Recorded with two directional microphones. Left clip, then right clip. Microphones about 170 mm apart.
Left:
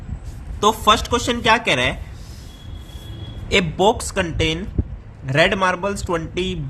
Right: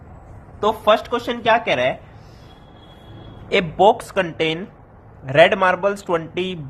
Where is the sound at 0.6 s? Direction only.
40° left (ahead or behind).